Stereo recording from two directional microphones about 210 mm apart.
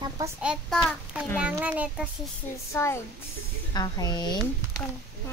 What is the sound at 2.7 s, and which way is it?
A woman's voice, 10° left (ahead or behind).